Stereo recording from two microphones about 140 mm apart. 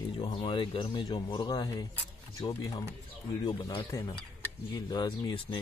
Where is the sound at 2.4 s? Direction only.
40° left (ahead or behind).